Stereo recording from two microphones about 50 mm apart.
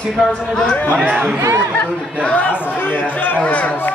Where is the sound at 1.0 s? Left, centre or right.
Right.